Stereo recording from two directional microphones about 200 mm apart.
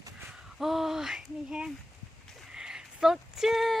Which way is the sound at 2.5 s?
5° right (ahead or behind).